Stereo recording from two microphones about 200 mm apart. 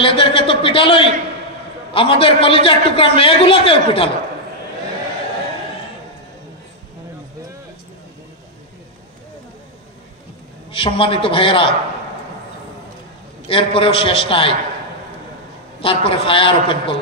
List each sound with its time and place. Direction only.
0.0 s a man's voice: 25° left (ahead or behind)
10.7 s a man's voice: 25° left (ahead or behind)
13.5 s a man's voice: 25° left (ahead or behind)
15.8 s a man's voice: 25° left (ahead or behind)